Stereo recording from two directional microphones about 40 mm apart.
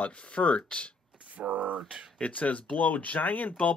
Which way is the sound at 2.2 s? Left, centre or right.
Left.